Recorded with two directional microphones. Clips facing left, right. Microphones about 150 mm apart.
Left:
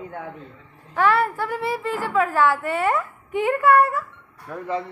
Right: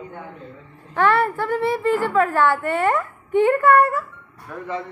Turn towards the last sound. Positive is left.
turn(degrees=35)  # may be behind; listen again after turning